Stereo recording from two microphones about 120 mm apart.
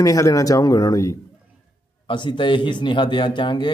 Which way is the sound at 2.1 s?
40° left (ahead or behind).